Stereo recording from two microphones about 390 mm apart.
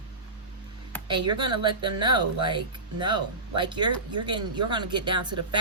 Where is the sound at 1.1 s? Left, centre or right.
Centre.